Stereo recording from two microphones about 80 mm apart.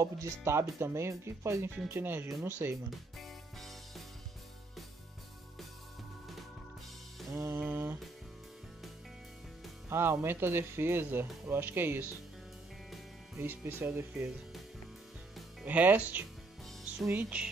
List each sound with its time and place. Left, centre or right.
0.0 s speech: right
2.9 s music: centre
7.2 s music: right
7.6 s music: right
9.8 s speech: right
13.4 s speech: right
15.6 s speech: right